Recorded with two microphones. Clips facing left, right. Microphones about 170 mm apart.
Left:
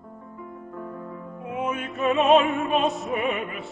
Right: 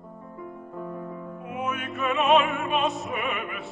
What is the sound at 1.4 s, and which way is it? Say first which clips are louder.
Music: left 3 dB; 25° left (ahead or behind).